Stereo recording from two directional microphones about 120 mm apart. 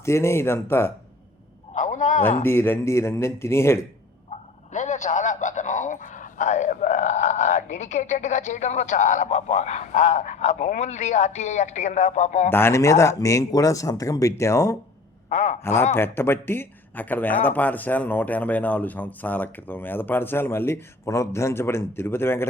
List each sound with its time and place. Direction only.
0.0 s speech: 25° left (ahead or behind)
1.7 s a sound: 90° left
2.4 s speech: 20° left (ahead or behind)
4.3 s bow-wow: 80° left
12.5 s speech: 20° left (ahead or behind)
15.3 s speech: 90° left
15.6 s speech: 20° left (ahead or behind)